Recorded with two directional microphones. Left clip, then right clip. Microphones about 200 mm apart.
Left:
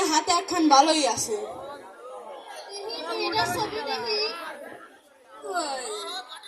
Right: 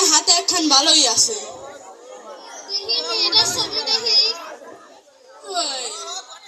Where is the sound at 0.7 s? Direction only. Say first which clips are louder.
Right 4 dB; 10° right (ahead or behind).